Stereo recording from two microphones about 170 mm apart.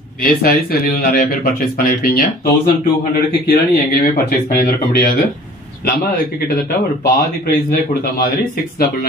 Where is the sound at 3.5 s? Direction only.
65° left (ahead or behind).